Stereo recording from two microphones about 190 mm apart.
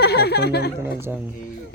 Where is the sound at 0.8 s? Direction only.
15° right (ahead or behind).